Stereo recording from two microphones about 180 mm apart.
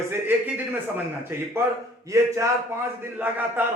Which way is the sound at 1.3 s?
15° right (ahead or behind).